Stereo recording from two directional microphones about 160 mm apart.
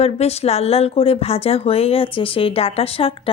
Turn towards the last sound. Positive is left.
turn(degrees=35)  # may be behind; listen again after turning